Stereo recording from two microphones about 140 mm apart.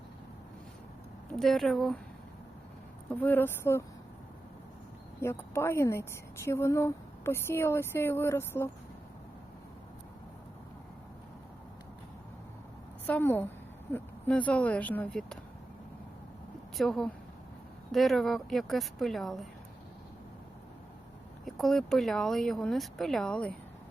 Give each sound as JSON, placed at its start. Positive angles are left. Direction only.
{"t": 1.3, "sound": "speech", "side_deg": 0}
{"t": 3.2, "sound": "speech", "side_deg": 15}
{"t": 5.2, "sound": "speech", "side_deg": 15}
{"t": 13.1, "sound": "speech", "side_deg": 15}
{"t": 16.7, "sound": "speech", "side_deg": 0}
{"t": 21.4, "sound": "speech", "side_deg": 0}